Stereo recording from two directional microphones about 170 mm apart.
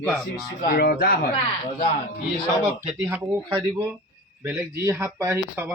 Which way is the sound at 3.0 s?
15° right (ahead or behind).